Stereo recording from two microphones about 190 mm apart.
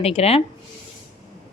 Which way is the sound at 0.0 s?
30° left (ahead or behind).